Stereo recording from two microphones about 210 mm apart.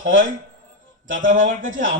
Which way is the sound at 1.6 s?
65° right (ahead or behind).